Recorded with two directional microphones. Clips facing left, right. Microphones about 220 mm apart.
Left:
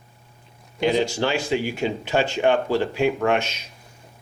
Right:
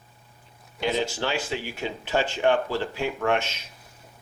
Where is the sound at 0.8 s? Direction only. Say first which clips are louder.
Left 6 dB; 15° left (ahead or behind).